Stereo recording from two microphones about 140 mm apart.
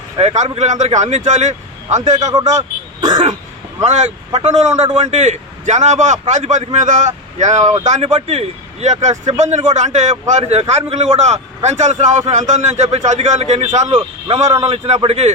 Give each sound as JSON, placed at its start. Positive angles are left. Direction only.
{"t": 0.2, "sound": "speech", "side_deg": -50}
{"t": 2.1, "sound": "speech", "side_deg": -25}
{"t": 2.6, "sound": "throat clearing", "side_deg": -30}
{"t": 3.8, "sound": "a man's voice", "side_deg": -55}
{"t": 10.6, "sound": "a man's voice", "side_deg": -45}
{"t": 13.8, "sound": "speech", "side_deg": -30}
{"t": 14.6, "sound": "a man's voice", "side_deg": -45}